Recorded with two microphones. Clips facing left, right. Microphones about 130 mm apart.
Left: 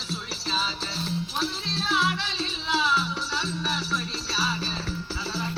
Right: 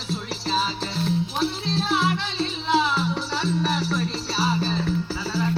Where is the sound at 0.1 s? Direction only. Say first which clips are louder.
Right 6 dB; 50° right (ahead or behind).